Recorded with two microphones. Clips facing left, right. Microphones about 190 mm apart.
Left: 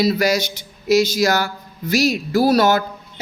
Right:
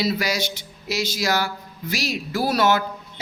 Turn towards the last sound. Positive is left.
turn(degrees=40)  # may be behind; listen again after turning